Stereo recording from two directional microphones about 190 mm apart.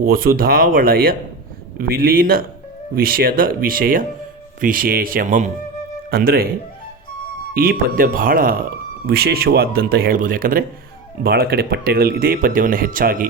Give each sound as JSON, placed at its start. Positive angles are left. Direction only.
{"t": 0.1, "sound": "speech", "side_deg": -50}
{"t": 7.5, "sound": "speech", "side_deg": -50}